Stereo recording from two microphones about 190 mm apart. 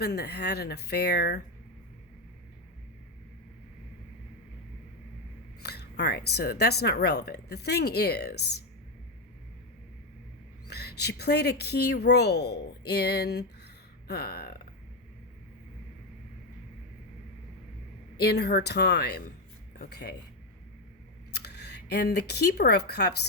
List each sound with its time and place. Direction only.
0.0 s speech: 60° left (ahead or behind)
5.6 s speech: 60° left (ahead or behind)
10.7 s speech: 60° left (ahead or behind)
18.2 s speech: 60° left (ahead or behind)
21.3 s speech: 60° left (ahead or behind)